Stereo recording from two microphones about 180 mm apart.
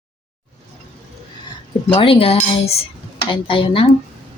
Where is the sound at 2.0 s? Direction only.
30° left (ahead or behind).